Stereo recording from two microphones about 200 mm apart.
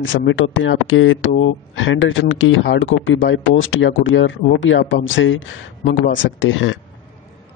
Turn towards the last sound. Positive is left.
turn(degrees=75)  # may be behind; listen again after turning